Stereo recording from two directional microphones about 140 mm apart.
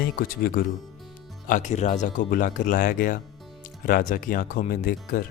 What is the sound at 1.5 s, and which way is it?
Speech, 60° left (ahead or behind).